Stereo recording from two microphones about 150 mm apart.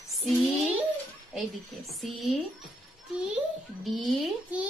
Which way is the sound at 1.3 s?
Centre (ahead or behind).